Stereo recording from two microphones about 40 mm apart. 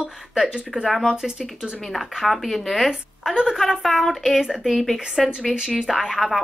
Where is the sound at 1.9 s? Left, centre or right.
Centre.